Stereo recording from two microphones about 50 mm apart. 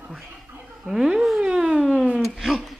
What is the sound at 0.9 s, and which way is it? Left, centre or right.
A woman's voice, centre.